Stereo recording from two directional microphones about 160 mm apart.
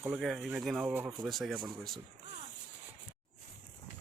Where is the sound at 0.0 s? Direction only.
5° right (ahead or behind).